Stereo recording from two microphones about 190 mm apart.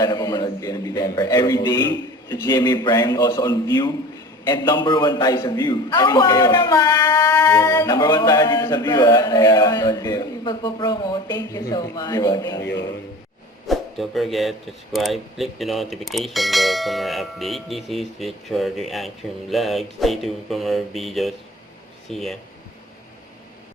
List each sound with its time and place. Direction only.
0.0 s a man's voice: 20° left (ahead or behind)
13.7 s speech: centre (ahead or behind)